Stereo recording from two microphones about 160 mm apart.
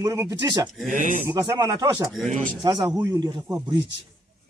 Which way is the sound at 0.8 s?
50° right (ahead or behind).